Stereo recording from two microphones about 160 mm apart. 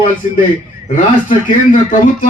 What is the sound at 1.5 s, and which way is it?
Speech, 55° left (ahead or behind).